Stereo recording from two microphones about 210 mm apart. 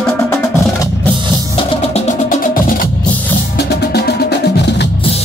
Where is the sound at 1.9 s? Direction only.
35° left (ahead or behind).